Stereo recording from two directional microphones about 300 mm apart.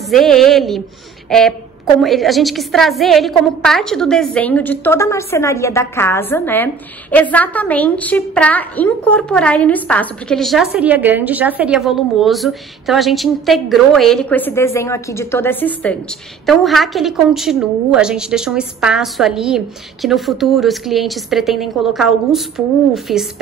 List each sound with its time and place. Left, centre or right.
0.1 s a woman's voice: centre